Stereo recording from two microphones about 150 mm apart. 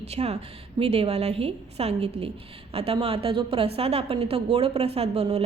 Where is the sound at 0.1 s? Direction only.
45° right (ahead or behind).